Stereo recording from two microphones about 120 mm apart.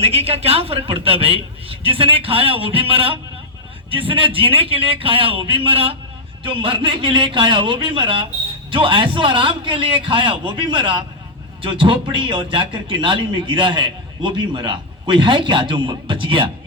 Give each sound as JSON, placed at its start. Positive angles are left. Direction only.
{"t": 0.0, "sound": "a man's voice", "side_deg": -55}